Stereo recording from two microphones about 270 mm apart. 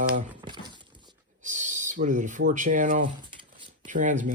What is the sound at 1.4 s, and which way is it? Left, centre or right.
Speech, right.